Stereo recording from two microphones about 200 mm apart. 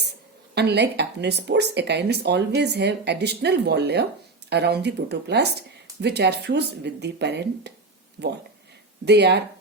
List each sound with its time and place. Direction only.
0.5 s speech: 55° right (ahead or behind)
9.0 s speech: 55° right (ahead or behind)